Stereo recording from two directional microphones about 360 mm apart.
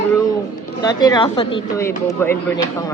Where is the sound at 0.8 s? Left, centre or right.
Centre.